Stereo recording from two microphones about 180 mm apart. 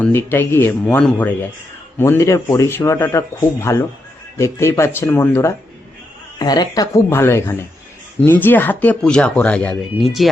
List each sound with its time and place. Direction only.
0.0 s a man's voice: 10° left (ahead or behind)